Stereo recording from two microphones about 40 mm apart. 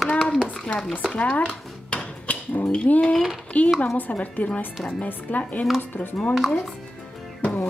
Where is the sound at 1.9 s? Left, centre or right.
Left.